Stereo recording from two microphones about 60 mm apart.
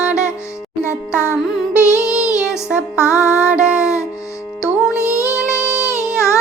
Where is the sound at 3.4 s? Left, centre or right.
Centre.